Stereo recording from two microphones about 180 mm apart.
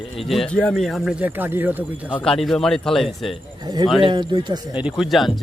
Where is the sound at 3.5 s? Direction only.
20° right (ahead or behind).